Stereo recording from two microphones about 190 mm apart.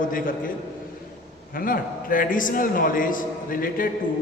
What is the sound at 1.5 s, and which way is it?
A man's voice, 50° left (ahead or behind).